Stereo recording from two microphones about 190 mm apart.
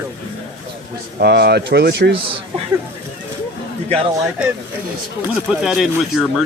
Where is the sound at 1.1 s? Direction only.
55° right (ahead or behind).